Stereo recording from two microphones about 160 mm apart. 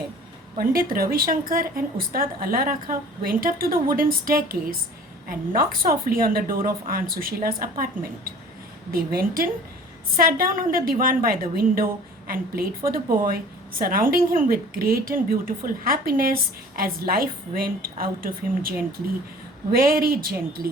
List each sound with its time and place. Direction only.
0.5 s a woman's voice: 65° right (ahead or behind)
8.9 s a woman's voice: 65° right (ahead or behind)
19.7 s speech: 65° right (ahead or behind)